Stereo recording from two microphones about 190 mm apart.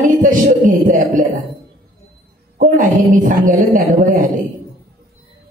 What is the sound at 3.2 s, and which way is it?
Speech, 45° right (ahead or behind).